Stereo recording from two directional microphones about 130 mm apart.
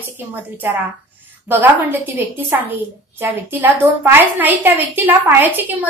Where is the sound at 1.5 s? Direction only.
15° right (ahead or behind).